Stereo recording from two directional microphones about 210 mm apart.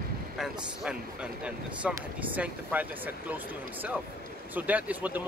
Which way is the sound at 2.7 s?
5° right (ahead or behind).